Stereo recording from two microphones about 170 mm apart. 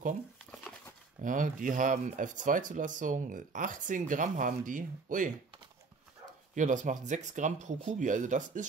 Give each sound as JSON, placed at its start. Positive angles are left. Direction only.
{"t": 1.2, "sound": "speech", "side_deg": -50}
{"t": 6.5, "sound": "speech", "side_deg": -45}